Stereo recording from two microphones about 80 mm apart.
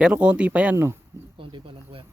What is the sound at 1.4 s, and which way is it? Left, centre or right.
Speech, right.